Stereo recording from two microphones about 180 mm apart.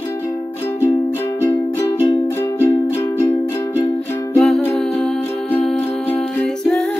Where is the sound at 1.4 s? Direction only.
15° left (ahead or behind).